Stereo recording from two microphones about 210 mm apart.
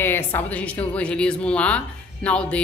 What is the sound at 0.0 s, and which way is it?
A woman's voice, 10° left (ahead or behind).